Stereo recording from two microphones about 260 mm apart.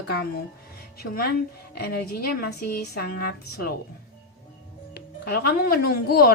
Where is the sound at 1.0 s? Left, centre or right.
Left.